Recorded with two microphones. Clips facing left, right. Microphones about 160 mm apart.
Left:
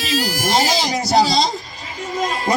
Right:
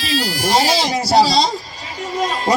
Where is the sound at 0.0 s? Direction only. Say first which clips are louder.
Right 1 dB; 40° left (ahead or behind).